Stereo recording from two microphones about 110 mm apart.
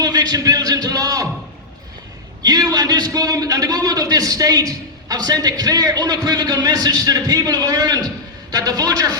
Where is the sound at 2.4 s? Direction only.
35° right (ahead or behind).